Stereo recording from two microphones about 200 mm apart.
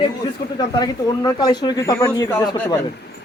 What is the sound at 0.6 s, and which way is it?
Speech, 20° left (ahead or behind).